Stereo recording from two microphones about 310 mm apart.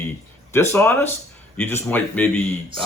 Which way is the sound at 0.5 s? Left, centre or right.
Centre.